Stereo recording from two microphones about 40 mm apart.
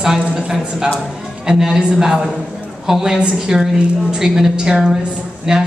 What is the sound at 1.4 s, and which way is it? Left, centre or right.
A woman's voice, centre.